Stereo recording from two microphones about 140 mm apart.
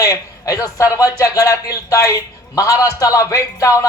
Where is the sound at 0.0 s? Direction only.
25° left (ahead or behind).